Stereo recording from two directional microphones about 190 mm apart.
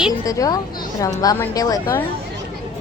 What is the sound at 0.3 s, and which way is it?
Speech, 20° left (ahead or behind).